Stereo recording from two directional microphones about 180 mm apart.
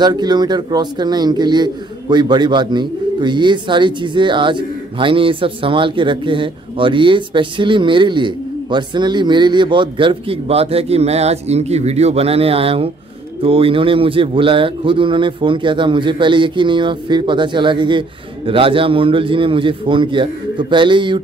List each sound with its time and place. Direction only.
0.0 s a man's voice: 25° right (ahead or behind)